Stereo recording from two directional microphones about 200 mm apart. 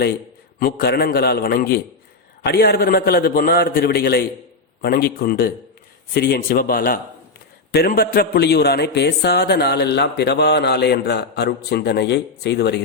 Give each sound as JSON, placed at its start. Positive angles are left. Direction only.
{"t": 0.6, "sound": "a man's voice", "side_deg": 50}